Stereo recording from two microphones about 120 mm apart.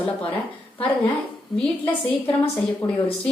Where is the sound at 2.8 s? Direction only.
25° left (ahead or behind).